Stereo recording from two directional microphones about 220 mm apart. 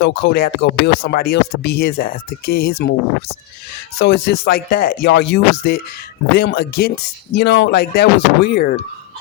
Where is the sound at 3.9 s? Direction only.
45° left (ahead or behind).